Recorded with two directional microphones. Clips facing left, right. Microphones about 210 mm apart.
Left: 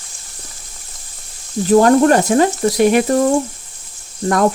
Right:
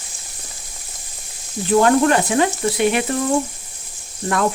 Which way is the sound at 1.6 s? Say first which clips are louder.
Left 4 dB; 40° left (ahead or behind).